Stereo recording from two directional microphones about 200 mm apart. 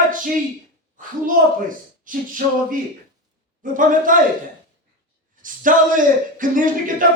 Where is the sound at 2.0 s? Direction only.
40° right (ahead or behind).